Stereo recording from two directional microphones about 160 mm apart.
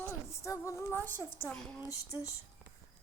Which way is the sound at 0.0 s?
20° left (ahead or behind).